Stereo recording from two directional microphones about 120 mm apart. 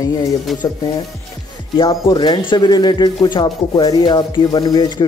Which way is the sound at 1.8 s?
40° left (ahead or behind).